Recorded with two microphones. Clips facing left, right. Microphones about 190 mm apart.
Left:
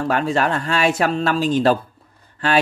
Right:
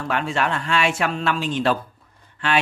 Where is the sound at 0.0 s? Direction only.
40° left (ahead or behind).